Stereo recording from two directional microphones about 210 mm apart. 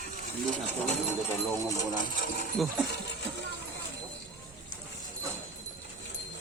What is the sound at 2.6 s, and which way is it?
Speech, centre (ahead or behind).